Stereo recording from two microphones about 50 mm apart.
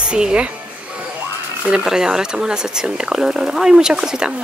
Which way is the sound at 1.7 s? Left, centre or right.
Centre.